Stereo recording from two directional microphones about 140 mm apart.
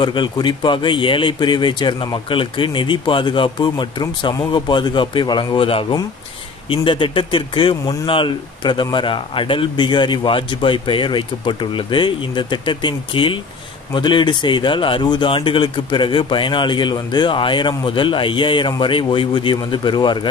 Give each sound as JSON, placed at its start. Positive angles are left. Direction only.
{"t": 0.0, "sound": "speech", "side_deg": 35}